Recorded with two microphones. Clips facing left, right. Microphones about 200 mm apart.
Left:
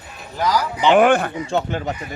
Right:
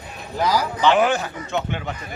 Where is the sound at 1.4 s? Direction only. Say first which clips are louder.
Left 4 dB; 35° left (ahead or behind).